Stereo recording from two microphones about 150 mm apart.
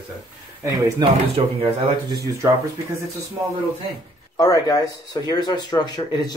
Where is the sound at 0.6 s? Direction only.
20° right (ahead or behind).